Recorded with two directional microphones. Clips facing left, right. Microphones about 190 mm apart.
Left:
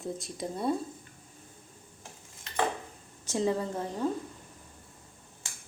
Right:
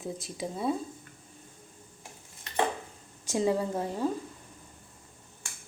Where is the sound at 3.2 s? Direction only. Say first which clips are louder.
Right 2 dB; 10° right (ahead or behind).